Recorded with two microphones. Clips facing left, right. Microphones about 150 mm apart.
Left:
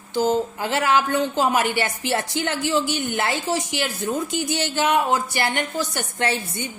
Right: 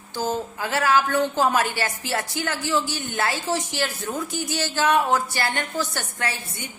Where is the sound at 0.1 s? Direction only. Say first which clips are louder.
Left 6 dB; 20° left (ahead or behind).